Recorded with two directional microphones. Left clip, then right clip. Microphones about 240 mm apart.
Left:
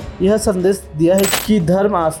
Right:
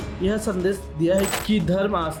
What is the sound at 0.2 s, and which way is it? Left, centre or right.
Speech, left.